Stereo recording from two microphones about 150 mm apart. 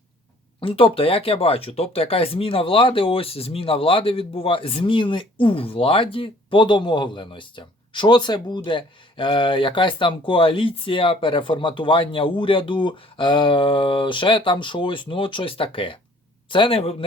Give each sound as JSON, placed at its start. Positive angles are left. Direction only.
{"t": 0.6, "sound": "speech", "side_deg": 35}